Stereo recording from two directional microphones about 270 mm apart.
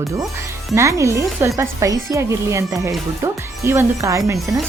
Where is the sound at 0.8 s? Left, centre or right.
Centre.